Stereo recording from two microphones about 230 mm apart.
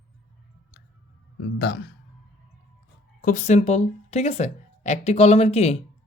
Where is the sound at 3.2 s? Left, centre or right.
Left.